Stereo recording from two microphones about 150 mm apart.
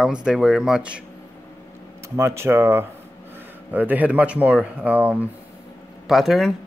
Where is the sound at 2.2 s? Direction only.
15° right (ahead or behind).